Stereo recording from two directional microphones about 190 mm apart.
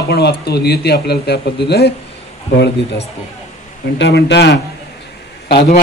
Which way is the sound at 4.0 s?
65° left (ahead or behind).